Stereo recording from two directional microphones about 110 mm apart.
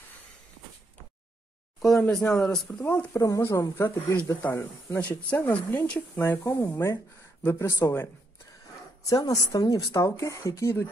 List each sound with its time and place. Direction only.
1.8 s a man's voice: 5° left (ahead or behind)
3.1 s speech: 30° left (ahead or behind)
5.3 s speech: 15° left (ahead or behind)
9.1 s speech: 35° left (ahead or behind)